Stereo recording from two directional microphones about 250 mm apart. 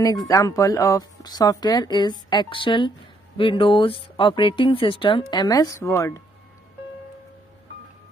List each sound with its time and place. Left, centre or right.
0.0 s speech: centre